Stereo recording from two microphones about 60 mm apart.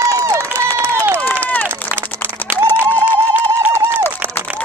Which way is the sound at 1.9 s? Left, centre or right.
Right.